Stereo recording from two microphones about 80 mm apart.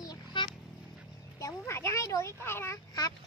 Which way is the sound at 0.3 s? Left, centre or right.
Left.